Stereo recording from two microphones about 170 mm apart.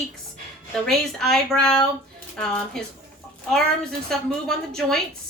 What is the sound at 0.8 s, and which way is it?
A woman's voice, centre (ahead or behind).